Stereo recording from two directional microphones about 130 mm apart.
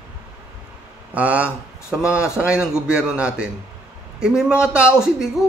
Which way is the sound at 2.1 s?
20° left (ahead or behind).